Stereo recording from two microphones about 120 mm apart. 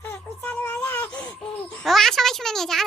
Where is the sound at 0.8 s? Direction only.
10° left (ahead or behind).